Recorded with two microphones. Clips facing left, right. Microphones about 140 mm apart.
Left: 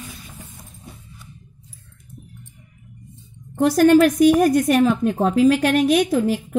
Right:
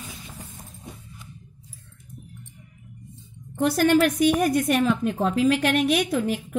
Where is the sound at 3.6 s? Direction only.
40° left (ahead or behind).